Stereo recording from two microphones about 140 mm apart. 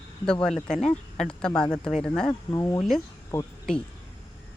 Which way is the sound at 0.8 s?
55° left (ahead or behind).